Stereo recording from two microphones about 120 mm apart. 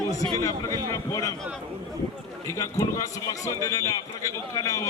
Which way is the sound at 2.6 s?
25° left (ahead or behind).